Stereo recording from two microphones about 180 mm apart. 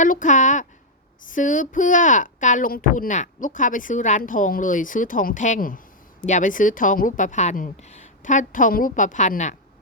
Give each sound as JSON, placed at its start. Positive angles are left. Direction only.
{"t": 0.0, "sound": "speech", "side_deg": 45}